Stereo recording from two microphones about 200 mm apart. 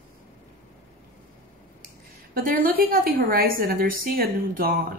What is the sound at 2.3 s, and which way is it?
A woman's voice, 45° right (ahead or behind).